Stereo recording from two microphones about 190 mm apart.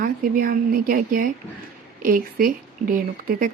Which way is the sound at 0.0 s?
45° right (ahead or behind).